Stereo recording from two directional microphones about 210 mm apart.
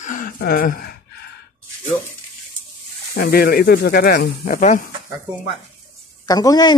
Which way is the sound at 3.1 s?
45° left (ahead or behind).